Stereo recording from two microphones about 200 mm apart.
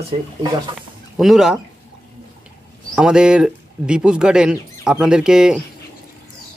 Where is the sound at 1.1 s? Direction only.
Centre (ahead or behind).